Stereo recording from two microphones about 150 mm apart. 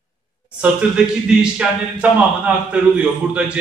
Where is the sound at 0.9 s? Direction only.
5° right (ahead or behind).